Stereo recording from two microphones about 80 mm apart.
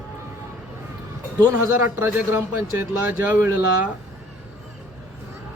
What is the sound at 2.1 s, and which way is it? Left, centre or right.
A man's voice, right.